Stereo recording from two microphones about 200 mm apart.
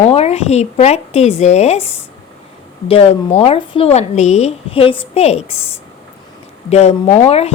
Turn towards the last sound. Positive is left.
turn(degrees=30)  # may be behind; listen again after turning